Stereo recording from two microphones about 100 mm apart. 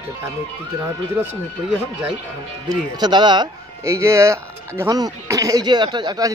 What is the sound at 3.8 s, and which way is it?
Speech, 30° right (ahead or behind).